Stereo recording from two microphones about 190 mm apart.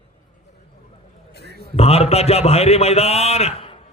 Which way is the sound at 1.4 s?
60° left (ahead or behind).